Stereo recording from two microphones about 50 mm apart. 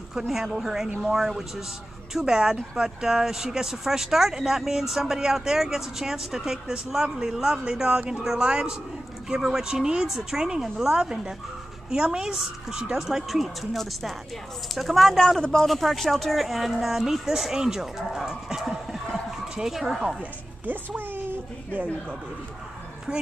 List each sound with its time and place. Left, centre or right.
0.3 s speech: centre
20.6 s speech: right